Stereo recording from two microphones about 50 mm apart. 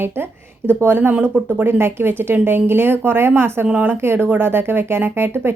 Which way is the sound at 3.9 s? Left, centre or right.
Right.